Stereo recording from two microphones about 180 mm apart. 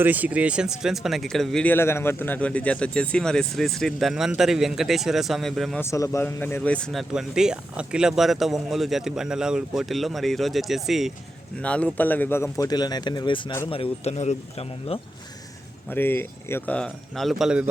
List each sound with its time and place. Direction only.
0.0 s speech: 10° right (ahead or behind)
5.8 s speech: 15° left (ahead or behind); by 15.0 s 35° left (ahead or behind)
15.9 s speech: 10° left (ahead or behind); by 17.7 s 5° right (ahead or behind)